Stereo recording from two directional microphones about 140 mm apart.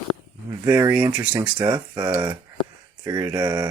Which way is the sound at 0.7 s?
15° right (ahead or behind).